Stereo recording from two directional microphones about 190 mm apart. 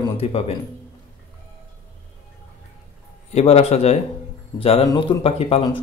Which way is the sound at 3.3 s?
35° left (ahead or behind).